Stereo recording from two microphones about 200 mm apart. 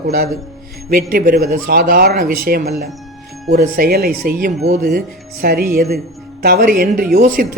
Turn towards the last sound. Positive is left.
turn(degrees=-45)  # may be behind; listen again after turning